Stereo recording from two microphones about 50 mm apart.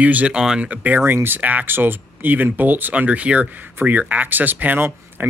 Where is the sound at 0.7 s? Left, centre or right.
Right.